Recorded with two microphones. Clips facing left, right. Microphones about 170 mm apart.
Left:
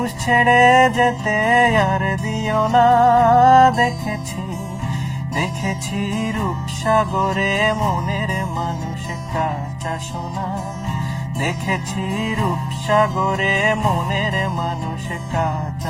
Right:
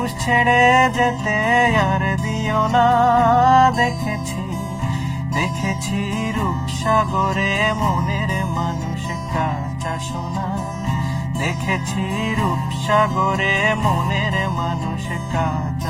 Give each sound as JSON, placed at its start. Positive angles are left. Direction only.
{"t": 0.0, "sound": "music", "side_deg": 50}
{"t": 7.3, "sound": "music", "side_deg": 50}
{"t": 12.9, "sound": "music", "side_deg": 45}